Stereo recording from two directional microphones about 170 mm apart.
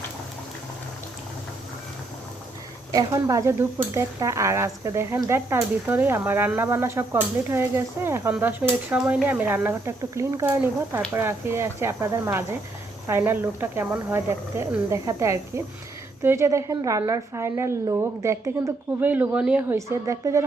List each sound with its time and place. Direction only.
2.9 s speech: 20° right (ahead or behind)
19.7 s speech: 15° right (ahead or behind)